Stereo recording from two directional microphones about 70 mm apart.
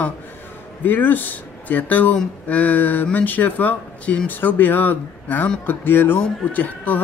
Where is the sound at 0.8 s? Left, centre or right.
Left.